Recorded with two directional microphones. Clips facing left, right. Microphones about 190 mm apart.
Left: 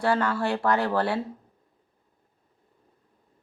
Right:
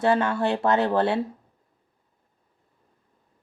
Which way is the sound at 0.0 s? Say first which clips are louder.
Right 3 dB; 25° right (ahead or behind).